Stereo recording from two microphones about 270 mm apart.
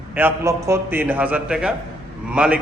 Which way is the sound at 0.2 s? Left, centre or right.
Centre.